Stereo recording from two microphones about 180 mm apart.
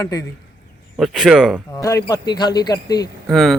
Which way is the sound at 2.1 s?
25° left (ahead or behind).